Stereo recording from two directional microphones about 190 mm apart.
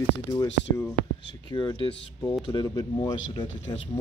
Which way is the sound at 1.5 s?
20° left (ahead or behind).